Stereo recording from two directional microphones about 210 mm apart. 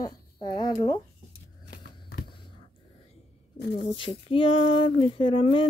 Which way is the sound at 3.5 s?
50° left (ahead or behind).